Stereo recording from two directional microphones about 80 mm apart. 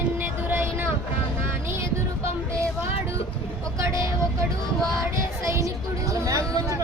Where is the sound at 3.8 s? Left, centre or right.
Right.